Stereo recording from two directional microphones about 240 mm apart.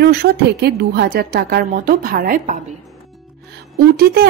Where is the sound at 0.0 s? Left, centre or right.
Right.